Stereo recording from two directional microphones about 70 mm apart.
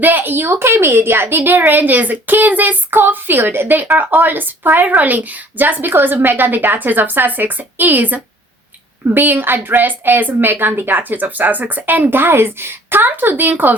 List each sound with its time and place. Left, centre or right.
0.0 s a woman's voice: right